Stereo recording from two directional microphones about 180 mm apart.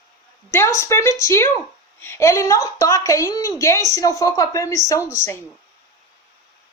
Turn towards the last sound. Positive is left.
turn(degrees=15)  # may be behind; listen again after turning